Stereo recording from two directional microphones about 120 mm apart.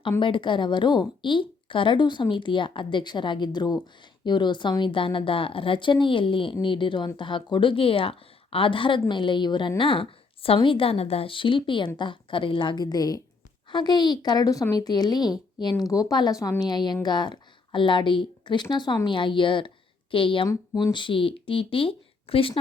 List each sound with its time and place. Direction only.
0.2 s a woman's voice: 45° left (ahead or behind)